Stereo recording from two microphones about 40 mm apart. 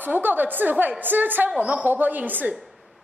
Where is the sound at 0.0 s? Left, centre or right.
Right.